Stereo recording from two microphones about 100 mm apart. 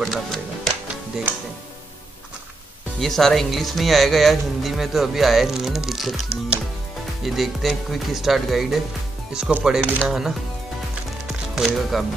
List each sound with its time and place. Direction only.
0.0 s speech: centre (ahead or behind)
1.3 s speech: 20° right (ahead or behind)
3.0 s speech: 5° left (ahead or behind)
7.2 s speech: centre (ahead or behind)
11.2 s music: 5° right (ahead or behind)